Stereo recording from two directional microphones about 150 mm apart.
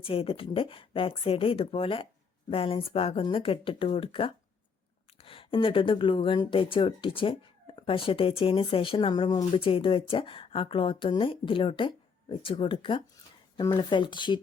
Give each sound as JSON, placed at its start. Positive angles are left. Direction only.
{"t": 0.0, "sound": "speech", "side_deg": 40}